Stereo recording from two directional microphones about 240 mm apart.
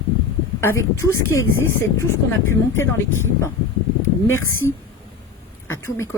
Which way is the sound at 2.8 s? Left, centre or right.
Left.